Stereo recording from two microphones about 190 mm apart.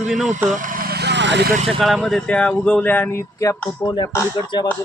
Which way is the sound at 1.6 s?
Centre (ahead or behind).